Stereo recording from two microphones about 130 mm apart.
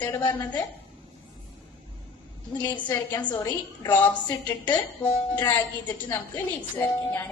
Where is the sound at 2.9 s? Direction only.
15° left (ahead or behind).